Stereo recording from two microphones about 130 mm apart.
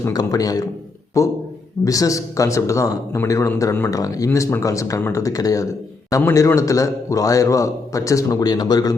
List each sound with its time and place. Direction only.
0.0 s a man's voice: 30° left (ahead or behind)